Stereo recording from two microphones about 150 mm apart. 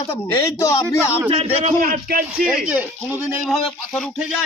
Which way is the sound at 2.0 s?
75° right (ahead or behind).